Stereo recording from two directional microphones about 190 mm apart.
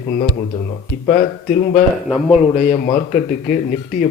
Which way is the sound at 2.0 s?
5° right (ahead or behind).